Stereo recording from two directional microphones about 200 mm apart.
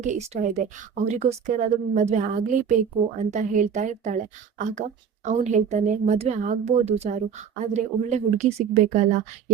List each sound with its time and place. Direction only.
0.0 s a woman's voice: 35° right (ahead or behind)